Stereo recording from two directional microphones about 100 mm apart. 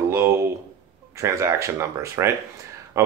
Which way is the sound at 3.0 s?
30° right (ahead or behind).